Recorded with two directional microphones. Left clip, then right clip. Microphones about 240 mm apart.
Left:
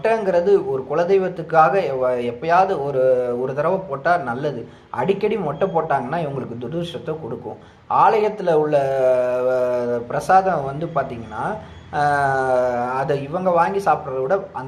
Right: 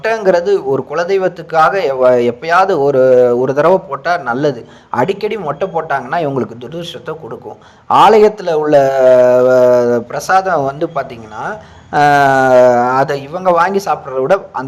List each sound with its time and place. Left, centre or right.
0.0 s a man's voice: right